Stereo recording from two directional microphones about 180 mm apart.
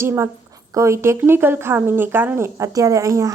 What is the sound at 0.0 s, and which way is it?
Speech, 15° right (ahead or behind).